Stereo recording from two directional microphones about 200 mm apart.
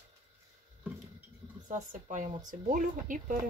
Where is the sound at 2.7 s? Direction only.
40° right (ahead or behind).